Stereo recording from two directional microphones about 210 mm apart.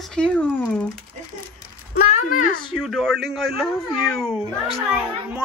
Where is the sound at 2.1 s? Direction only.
40° left (ahead or behind).